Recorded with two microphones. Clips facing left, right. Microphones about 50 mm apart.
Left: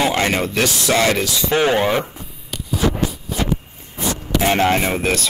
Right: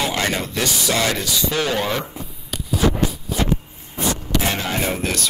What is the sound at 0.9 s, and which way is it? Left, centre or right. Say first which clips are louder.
Speech: left 5 dB; left.